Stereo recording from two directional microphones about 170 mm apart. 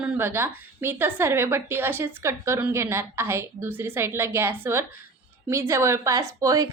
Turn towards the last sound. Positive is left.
turn(degrees=-20)  # may be behind; listen again after turning